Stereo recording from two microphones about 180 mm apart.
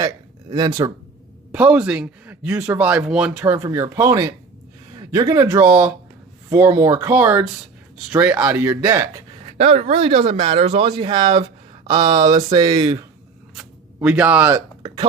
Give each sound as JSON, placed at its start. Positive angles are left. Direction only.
{"t": 0.5, "sound": "speech", "side_deg": -20}
{"t": 1.5, "sound": "speech", "side_deg": -5}
{"t": 3.4, "sound": "speech", "side_deg": -15}
{"t": 9.6, "sound": "speech", "side_deg": -35}
{"t": 13.6, "sound": "speech", "side_deg": -5}